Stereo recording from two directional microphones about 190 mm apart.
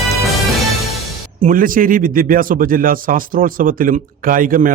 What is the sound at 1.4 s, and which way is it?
A man's voice, 45° right (ahead or behind).